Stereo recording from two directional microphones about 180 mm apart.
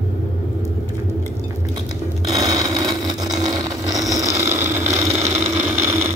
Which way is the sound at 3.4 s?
20° right (ahead or behind).